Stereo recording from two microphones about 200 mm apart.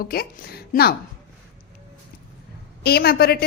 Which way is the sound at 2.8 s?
50° left (ahead or behind).